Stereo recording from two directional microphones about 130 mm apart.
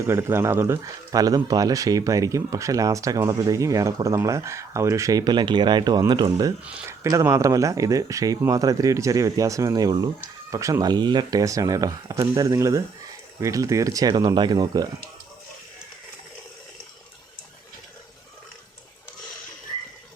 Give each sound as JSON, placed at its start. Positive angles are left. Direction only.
{"t": 0.0, "sound": "speech", "side_deg": -20}